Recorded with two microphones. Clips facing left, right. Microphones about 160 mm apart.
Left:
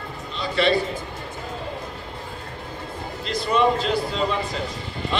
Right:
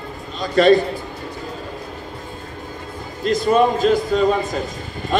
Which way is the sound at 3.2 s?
45° right (ahead or behind).